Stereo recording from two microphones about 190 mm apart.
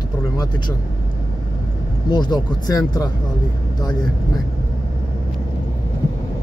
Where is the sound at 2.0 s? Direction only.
20° left (ahead or behind).